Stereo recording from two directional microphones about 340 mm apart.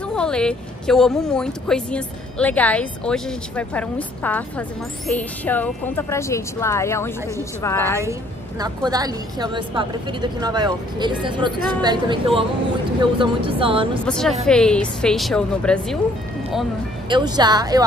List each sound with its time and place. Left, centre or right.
0.1 s speech: centre
8.0 s a woman's voice: centre
14.0 s speech: centre
17.1 s a woman's voice: centre